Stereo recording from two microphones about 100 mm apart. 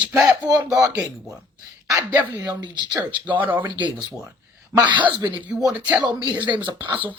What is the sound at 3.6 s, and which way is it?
Speech, 50° right (ahead or behind).